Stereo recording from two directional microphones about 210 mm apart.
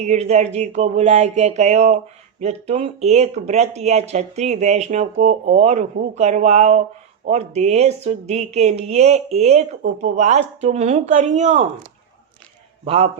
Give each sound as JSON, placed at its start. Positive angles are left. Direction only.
{"t": 0.0, "sound": "a man's voice", "side_deg": -30}